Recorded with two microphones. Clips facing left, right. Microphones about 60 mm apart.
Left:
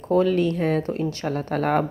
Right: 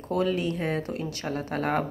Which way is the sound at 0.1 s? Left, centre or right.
Left.